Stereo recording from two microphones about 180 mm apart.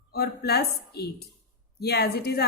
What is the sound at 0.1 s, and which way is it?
A woman's voice, 60° left (ahead or behind).